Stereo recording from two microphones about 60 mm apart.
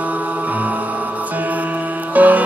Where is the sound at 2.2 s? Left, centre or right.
Right.